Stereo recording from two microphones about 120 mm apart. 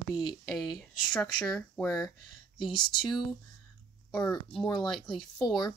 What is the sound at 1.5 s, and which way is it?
Speech, 20° left (ahead or behind).